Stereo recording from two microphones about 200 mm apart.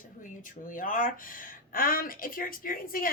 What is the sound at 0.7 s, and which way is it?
Speech, 40° left (ahead or behind).